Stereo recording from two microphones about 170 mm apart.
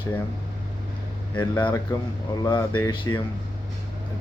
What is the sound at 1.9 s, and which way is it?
Speech, 20° left (ahead or behind).